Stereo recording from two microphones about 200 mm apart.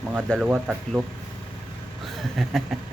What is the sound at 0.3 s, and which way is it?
Speech, 5° right (ahead or behind).